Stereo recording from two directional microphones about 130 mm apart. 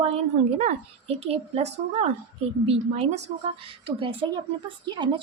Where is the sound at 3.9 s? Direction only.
40° right (ahead or behind).